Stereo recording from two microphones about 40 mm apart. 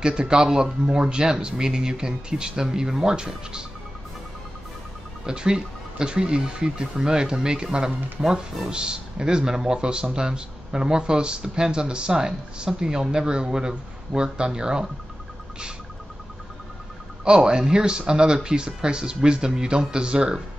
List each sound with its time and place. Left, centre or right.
0.0 s speech: right
5.2 s speech: centre
17.2 s speech: right